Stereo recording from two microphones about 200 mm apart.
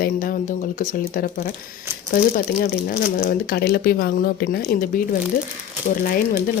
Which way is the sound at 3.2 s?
50° left (ahead or behind).